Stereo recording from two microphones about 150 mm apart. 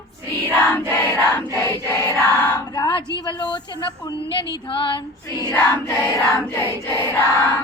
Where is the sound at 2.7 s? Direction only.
30° left (ahead or behind).